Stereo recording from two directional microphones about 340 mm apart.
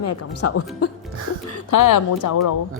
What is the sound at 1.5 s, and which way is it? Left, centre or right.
Speech, left.